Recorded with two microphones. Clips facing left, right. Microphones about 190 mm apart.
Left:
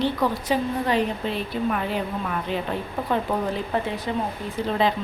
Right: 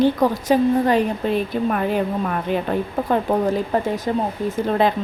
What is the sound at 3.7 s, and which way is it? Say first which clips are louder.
A woman's voice: right 5 dB; 45° right (ahead or behind).